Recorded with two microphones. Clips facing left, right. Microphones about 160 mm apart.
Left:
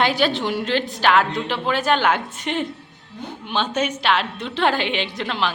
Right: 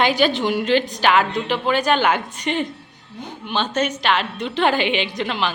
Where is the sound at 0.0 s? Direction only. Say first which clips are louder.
Right 2 dB; centre (ahead or behind).